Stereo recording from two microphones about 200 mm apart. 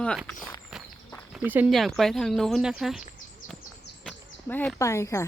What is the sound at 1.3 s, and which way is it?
Speech, 5° right (ahead or behind).